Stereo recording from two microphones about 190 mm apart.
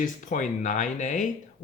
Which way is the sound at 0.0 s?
45° left (ahead or behind).